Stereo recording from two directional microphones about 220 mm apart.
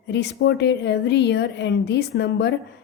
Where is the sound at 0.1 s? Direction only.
50° left (ahead or behind).